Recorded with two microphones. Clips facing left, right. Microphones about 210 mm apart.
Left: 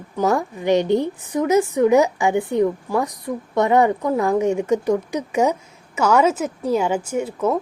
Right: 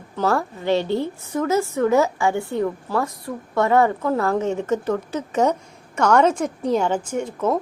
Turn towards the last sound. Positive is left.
turn(degrees=10)  # may be behind; listen again after turning